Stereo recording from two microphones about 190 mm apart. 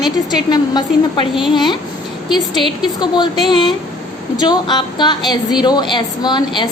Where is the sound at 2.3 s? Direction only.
25° left (ahead or behind).